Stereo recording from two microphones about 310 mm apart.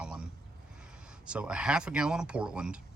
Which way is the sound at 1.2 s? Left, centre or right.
Centre.